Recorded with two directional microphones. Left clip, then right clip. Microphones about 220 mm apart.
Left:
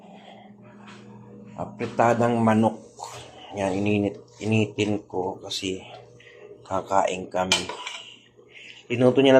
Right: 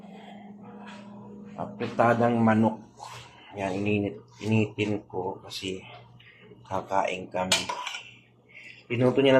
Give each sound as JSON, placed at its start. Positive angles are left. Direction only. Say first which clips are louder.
{"t": 1.5, "sound": "a man's voice", "louder": "left 2 dB", "side_deg": 15}
{"t": 6.7, "sound": "speech", "louder": "left 4 dB", "side_deg": 20}
{"t": 8.9, "sound": "speech", "louder": "left 4 dB", "side_deg": 25}